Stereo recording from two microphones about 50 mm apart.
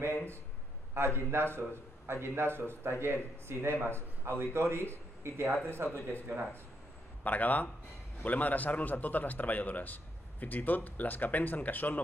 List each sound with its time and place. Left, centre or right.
0.9 s speech: right
7.2 s speech: left